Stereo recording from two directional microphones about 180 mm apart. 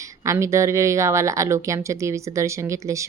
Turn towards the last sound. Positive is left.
turn(degrees=-15)  # may be behind; listen again after turning